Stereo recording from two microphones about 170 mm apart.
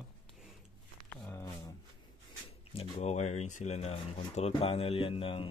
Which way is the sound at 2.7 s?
35° left (ahead or behind).